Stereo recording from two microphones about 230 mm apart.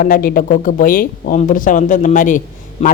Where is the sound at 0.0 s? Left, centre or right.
Left.